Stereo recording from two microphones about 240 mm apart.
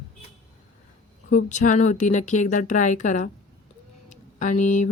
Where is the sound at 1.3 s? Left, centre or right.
Left.